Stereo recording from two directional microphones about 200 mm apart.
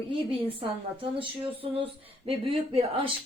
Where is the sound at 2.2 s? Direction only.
25° right (ahead or behind).